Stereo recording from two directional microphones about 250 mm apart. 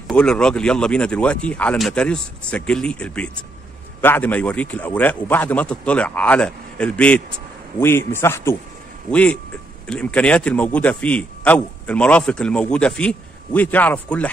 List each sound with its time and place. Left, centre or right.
0.1 s a man's voice: centre